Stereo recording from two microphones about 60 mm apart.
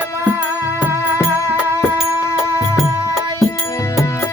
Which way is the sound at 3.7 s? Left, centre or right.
Left.